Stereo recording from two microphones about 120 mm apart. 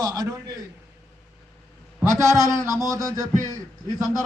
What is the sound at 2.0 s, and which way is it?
A man's voice, 25° right (ahead or behind).